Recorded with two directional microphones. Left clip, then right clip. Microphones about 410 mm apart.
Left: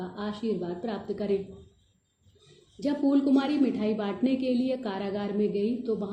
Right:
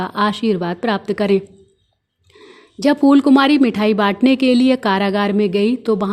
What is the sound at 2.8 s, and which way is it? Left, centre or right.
Speech, right.